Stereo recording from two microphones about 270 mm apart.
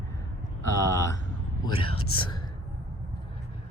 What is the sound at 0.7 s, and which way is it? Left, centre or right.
Speech, centre.